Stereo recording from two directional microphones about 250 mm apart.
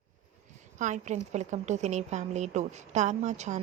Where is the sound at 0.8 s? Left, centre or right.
Right.